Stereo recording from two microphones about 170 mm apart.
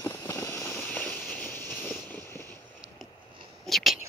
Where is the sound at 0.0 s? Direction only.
15° left (ahead or behind).